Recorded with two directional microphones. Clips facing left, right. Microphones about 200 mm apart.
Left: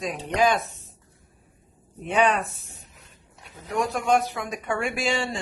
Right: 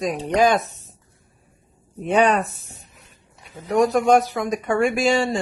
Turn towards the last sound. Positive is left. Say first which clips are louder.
# right 7 dB
turn(degrees=-45)  # may be behind; listen again after turning